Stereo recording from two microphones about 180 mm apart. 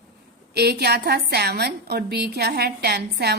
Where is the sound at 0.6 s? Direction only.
65° right (ahead or behind).